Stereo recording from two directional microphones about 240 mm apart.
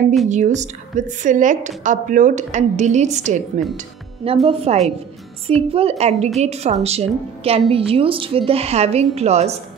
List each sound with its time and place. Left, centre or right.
0.3 s a woman's voice: right